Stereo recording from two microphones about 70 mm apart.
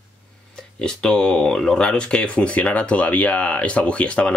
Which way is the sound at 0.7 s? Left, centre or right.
Centre.